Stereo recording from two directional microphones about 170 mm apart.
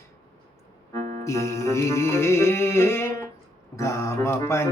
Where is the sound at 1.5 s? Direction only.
15° left (ahead or behind).